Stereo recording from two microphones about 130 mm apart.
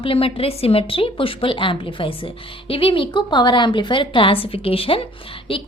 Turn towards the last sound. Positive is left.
turn(degrees=45)  # may be behind; listen again after turning